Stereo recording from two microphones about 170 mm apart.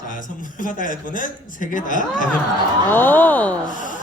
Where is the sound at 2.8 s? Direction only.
10° left (ahead or behind).